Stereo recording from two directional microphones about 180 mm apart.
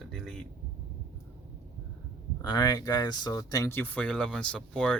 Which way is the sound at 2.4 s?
20° left (ahead or behind).